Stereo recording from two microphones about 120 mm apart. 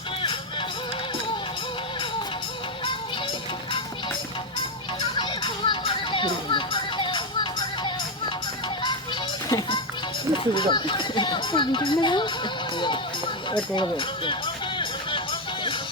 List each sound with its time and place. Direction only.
5.1 s children playing: 40° left (ahead or behind)
9.5 s music: 40° left (ahead or behind)
10.3 s speech: 40° left (ahead or behind)
13.5 s a sound: 45° left (ahead or behind)